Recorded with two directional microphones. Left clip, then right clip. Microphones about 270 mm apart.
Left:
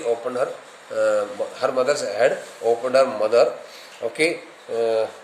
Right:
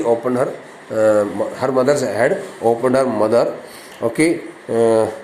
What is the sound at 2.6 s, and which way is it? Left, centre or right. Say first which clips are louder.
Speech: right 4 dB; right.